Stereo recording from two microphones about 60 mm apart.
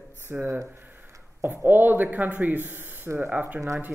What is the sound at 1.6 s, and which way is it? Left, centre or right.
Speech, right.